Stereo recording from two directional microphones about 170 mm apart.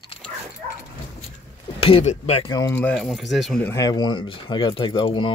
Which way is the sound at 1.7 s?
35° left (ahead or behind).